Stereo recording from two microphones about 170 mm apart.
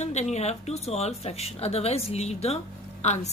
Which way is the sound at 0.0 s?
40° left (ahead or behind).